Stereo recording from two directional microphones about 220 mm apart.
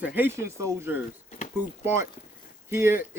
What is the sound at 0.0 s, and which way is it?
Speech, 10° right (ahead or behind).